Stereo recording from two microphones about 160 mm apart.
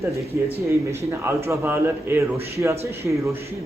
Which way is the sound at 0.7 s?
15° right (ahead or behind).